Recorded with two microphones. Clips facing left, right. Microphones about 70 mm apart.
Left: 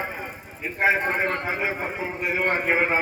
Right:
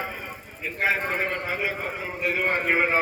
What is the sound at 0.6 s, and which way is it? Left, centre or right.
A man's voice, left.